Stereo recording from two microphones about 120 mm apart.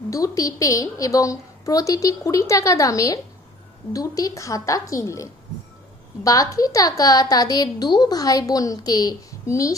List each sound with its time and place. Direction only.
0.1 s a woman's voice: 30° left (ahead or behind)